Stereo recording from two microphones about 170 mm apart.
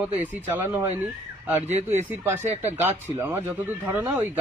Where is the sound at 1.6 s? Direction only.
40° right (ahead or behind).